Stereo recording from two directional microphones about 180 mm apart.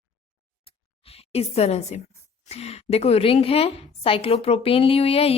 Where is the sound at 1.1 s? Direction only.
35° left (ahead or behind).